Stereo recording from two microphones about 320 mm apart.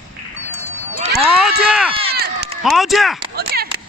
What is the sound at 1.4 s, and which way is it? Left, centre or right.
Run, centre.